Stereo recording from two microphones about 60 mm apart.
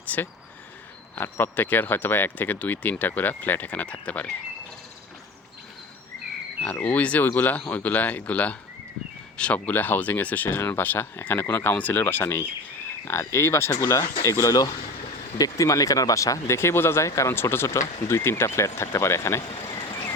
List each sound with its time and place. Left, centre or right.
0.1 s speech: left
6.7 s speech: left
16.6 s speech: left
17.1 s speech: left
17.3 s speech: left